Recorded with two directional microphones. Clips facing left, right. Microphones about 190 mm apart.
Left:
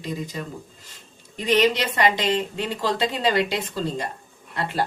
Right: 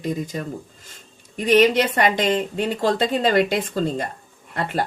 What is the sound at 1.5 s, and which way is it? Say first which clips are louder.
Speech: right 4 dB; 50° right (ahead or behind).